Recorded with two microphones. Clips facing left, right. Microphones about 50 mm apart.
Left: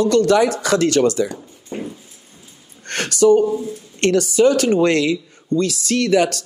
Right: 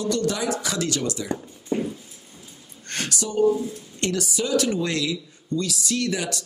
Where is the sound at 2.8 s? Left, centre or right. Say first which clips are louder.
Left 14 dB; left.